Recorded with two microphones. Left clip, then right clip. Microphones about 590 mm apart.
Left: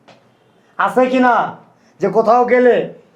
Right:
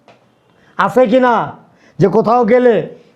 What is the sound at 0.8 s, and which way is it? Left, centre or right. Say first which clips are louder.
A man's voice: right 3 dB; right.